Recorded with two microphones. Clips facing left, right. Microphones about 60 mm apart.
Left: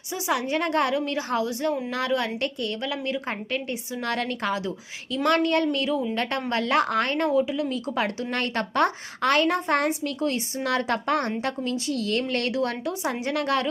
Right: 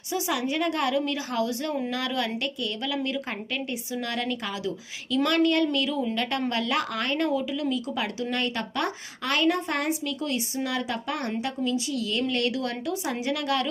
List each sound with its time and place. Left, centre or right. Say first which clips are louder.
0.1 s a woman's voice: left 2 dB; left
7.3 s a woman's voice: left 4 dB; left
7.7 s a woman's voice: left 2 dB; left
10.6 s a woman's voice: left 4 dB; left